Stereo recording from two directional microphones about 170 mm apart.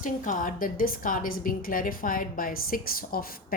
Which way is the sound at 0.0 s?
50° left (ahead or behind).